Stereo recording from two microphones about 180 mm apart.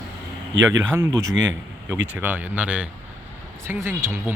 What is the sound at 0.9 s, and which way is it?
A man's voice, 15° right (ahead or behind).